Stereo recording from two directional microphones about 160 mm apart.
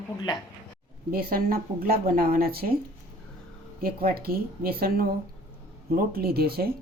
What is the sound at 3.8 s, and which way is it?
Speech, 70° right (ahead or behind).